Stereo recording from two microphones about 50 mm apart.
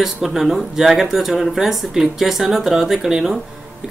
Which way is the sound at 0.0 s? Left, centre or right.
Centre.